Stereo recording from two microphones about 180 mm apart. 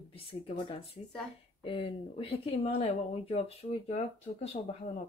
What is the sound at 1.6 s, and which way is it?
Speech, 30° left (ahead or behind).